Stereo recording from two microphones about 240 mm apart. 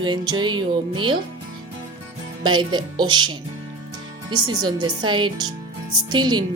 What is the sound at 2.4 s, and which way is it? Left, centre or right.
Speech, centre.